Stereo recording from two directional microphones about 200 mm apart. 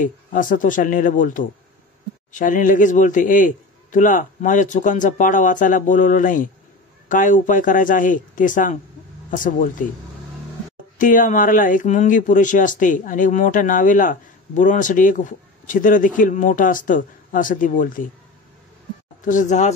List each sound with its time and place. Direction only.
0.0 s speech: 40° left (ahead or behind)
11.0 s speech: 40° left (ahead or behind)
19.2 s speech: 40° left (ahead or behind)